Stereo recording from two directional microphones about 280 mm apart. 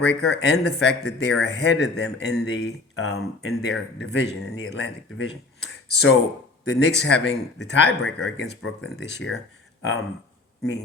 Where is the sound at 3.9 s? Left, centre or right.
Left.